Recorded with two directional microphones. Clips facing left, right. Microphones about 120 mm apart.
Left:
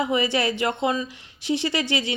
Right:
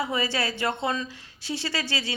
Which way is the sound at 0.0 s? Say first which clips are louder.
Left 5 dB; 15° left (ahead or behind).